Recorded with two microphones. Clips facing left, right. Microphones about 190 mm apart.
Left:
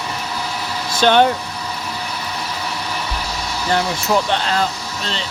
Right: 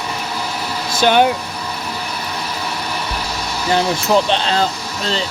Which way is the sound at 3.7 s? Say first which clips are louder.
Right 3 dB; 20° right (ahead or behind).